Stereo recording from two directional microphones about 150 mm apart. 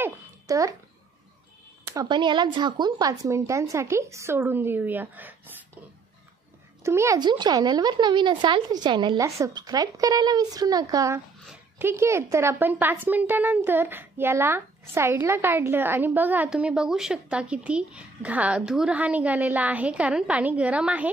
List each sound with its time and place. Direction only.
0.0 s babbling: 20° right (ahead or behind)
2.0 s a woman's voice: 30° right (ahead or behind); by 5.3 s 10° right (ahead or behind)
6.8 s a woman's voice: 20° right (ahead or behind)